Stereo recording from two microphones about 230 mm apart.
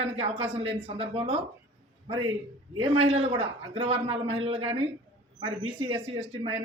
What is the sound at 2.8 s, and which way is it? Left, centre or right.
A man's voice, right.